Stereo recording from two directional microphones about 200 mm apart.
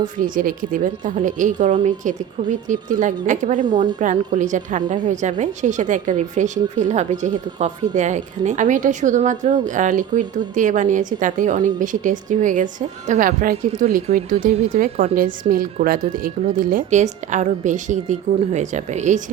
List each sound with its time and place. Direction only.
0.2 s a woman's voice: 45° right (ahead or behind)